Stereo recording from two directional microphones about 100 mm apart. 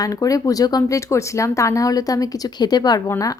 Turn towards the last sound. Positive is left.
turn(degrees=30)  # may be behind; listen again after turning